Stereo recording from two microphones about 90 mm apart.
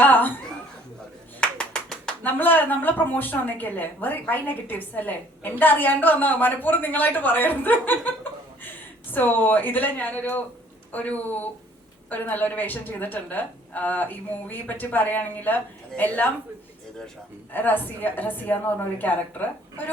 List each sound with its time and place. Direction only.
0.0 s chuckle: 20° left (ahead or behind)
1.4 s clapping: 10° left (ahead or behind)
2.2 s a woman's voice: 20° left (ahead or behind)
17.5 s a woman's voice: 20° left (ahead or behind)